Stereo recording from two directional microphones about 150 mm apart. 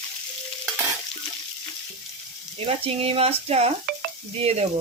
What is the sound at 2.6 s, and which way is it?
Speech, 40° right (ahead or behind).